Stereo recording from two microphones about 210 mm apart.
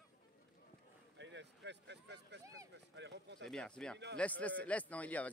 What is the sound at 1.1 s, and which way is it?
Speech, 60° right (ahead or behind).